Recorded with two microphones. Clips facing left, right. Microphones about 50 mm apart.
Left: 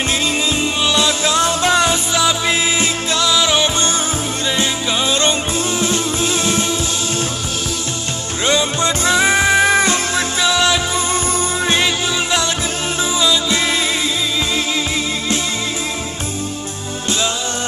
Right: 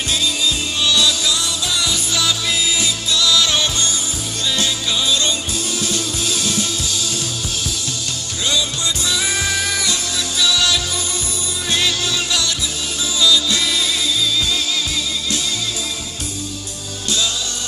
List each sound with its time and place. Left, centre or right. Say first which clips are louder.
0.1 s music: left 2 dB; left
8.4 s music: left 5 dB; left